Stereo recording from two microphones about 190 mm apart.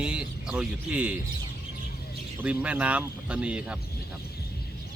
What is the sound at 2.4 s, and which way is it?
Speech, 5° right (ahead or behind).